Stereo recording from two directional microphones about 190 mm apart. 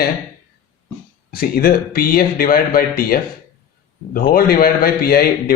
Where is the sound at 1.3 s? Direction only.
50° left (ahead or behind).